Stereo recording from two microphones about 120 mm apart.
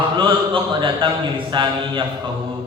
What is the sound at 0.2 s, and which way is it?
A man's voice, 45° right (ahead or behind).